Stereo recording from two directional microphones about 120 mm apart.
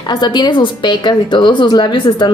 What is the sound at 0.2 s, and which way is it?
A woman's voice, 35° left (ahead or behind).